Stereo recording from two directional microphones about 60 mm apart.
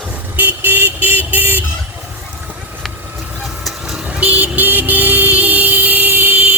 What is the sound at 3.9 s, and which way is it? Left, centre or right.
Vehicle, centre.